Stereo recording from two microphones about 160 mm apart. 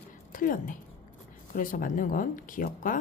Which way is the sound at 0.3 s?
60° left (ahead or behind).